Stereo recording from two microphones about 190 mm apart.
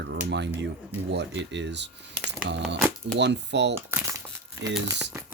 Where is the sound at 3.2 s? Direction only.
65° right (ahead or behind).